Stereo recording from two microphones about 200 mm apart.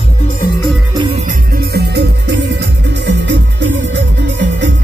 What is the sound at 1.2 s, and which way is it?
Music, 45° right (ahead or behind).